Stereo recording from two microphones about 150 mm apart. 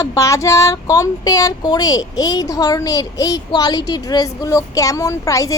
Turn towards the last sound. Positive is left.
turn(degrees=20)  # may be behind; listen again after turning